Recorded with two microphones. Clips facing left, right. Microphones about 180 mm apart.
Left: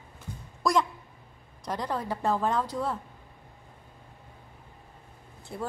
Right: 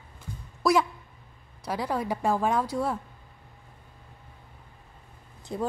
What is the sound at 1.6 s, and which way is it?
A woman's voice, 5° right (ahead or behind).